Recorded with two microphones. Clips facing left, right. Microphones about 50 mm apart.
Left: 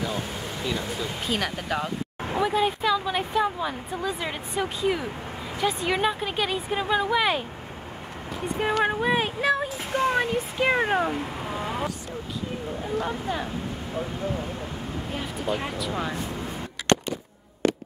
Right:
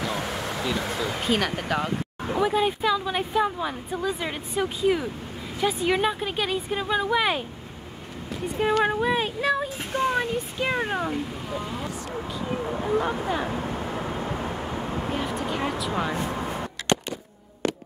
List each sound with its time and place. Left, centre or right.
0.1 s speech: right
1.2 s speech: centre
8.7 s speech: centre
13.3 s speech: centre
15.1 s speech: centre